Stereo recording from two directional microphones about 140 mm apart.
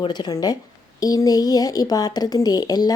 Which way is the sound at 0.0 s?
30° left (ahead or behind).